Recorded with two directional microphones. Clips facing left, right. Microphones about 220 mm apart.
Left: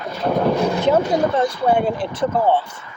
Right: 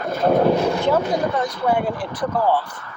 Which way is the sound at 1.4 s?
25° left (ahead or behind).